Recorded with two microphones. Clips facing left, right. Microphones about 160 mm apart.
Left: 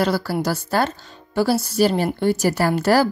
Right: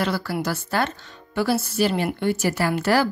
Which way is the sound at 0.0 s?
35° left (ahead or behind).